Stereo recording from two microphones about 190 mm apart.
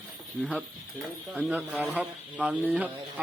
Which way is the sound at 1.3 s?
5° right (ahead or behind).